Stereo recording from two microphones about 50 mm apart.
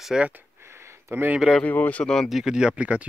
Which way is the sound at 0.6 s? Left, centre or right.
Right.